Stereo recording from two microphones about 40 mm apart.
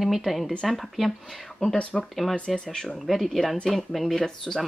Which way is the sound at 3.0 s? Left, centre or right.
Centre.